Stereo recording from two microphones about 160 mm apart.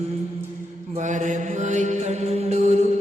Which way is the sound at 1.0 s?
50° right (ahead or behind).